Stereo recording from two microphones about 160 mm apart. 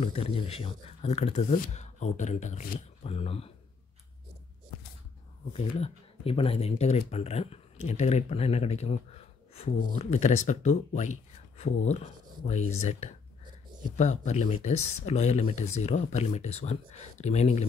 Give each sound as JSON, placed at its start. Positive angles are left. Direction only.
{"t": 0.0, "sound": "speech", "side_deg": 40}
{"t": 5.5, "sound": "speech", "side_deg": 40}